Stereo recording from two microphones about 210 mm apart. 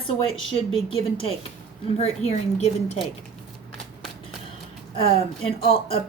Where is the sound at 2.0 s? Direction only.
30° left (ahead or behind).